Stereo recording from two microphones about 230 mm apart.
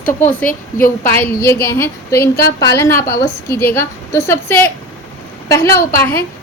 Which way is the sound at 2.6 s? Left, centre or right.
Centre.